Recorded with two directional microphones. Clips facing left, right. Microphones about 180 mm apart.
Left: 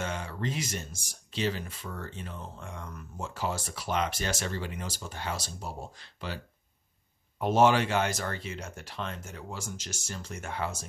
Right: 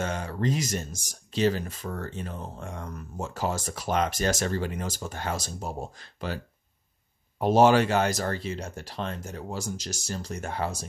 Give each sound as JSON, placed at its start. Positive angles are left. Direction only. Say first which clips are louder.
{"t": 0.0, "sound": "speech", "louder": "right 5 dB", "side_deg": -40}